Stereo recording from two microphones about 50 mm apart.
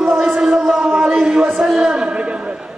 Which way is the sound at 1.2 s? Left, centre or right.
Centre.